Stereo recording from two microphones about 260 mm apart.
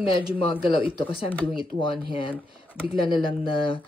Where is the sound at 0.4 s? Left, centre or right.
Centre.